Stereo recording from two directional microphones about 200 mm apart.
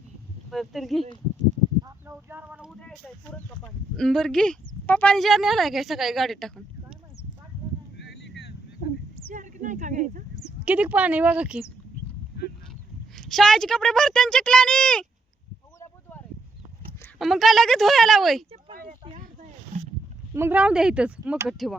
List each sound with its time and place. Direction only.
0.5 s speech: centre (ahead or behind)
1.8 s speech: 10° right (ahead or behind)
3.3 s speech: 5° left (ahead or behind)
8.0 s boat: 55° left (ahead or behind)
9.3 s speech: 40° right (ahead or behind)
10.7 s speech: 5° right (ahead or behind)
13.1 s speech: centre (ahead or behind)
15.8 s a sound: 10° left (ahead or behind)
17.2 s speech: centre (ahead or behind)
18.5 s a sound: 40° right (ahead or behind)
19.0 s boat: 35° right (ahead or behind)
20.3 s speech: 10° right (ahead or behind)